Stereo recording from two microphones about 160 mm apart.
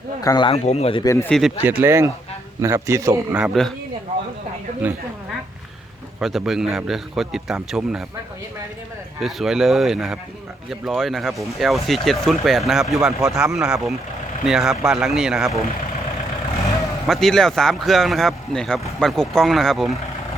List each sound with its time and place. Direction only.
0.2 s speech: 25° left (ahead or behind)
0.5 s speech: 45° left (ahead or behind)
1.0 s speech: 15° left (ahead or behind)
1.3 s speech: centre (ahead or behind)
1.8 s a man's voice: 15° right (ahead or behind)
3.3 s speech: centre (ahead or behind)
6.1 s speech: centre (ahead or behind)
9.2 s speech: centre (ahead or behind)
17.1 s speech: centre (ahead or behind)